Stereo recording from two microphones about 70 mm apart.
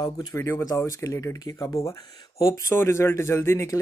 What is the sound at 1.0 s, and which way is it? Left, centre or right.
Speech, left.